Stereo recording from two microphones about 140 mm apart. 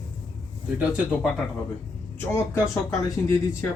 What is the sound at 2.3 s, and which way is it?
Speech, 20° left (ahead or behind).